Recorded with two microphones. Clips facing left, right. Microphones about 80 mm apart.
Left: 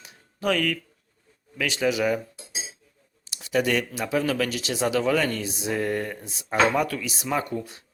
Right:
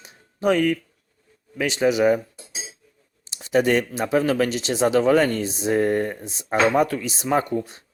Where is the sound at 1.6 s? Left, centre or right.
Right.